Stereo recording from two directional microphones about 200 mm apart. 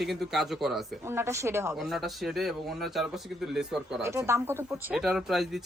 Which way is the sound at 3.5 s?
5° right (ahead or behind).